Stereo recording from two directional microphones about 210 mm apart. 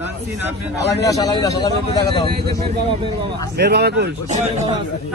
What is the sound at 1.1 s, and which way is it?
Speech, 20° left (ahead or behind).